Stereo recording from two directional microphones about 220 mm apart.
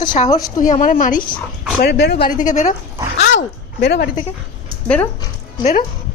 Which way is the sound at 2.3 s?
35° left (ahead or behind).